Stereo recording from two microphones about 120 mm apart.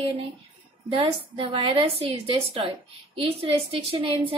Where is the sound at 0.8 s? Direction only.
55° right (ahead or behind).